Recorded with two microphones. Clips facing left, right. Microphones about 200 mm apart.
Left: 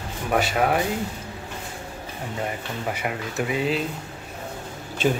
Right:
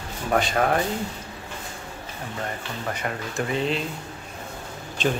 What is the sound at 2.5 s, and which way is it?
Speech, 10° left (ahead or behind).